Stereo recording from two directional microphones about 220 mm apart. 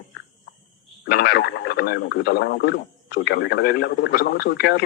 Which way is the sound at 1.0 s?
45° left (ahead or behind).